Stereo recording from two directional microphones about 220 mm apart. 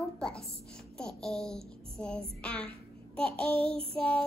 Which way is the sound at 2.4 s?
5° left (ahead or behind).